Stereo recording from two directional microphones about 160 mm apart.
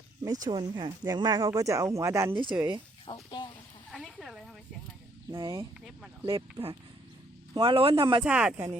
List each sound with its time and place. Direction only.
0.3 s speech: 25° right (ahead or behind)
2.3 s speech: 30° right (ahead or behind)
3.1 s speech: 30° left (ahead or behind)
3.9 s a sound: centre (ahead or behind)
5.3 s a man's voice: 25° right (ahead or behind)
8.2 s speech: 5° right (ahead or behind)